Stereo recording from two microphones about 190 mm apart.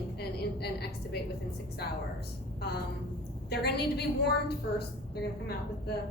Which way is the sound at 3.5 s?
60° left (ahead or behind).